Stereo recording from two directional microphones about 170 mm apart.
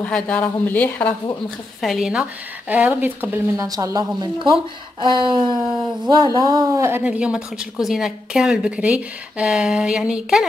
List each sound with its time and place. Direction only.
0.0 s speech: 10° left (ahead or behind); by 3.6 s 10° right (ahead or behind)
3.6 s speech: 20° right (ahead or behind)
7.0 s speech: 5° right (ahead or behind)